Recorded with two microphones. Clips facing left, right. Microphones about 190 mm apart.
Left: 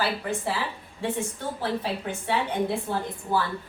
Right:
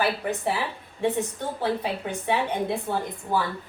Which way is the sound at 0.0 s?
20° right (ahead or behind).